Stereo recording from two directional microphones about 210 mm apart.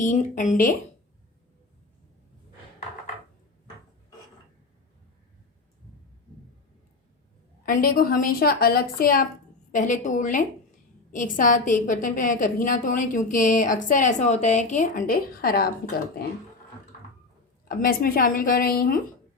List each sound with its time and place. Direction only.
0.0 s a woman's voice: 35° left (ahead or behind)
7.6 s a woman's voice: 40° left (ahead or behind)
17.7 s a woman's voice: 45° left (ahead or behind)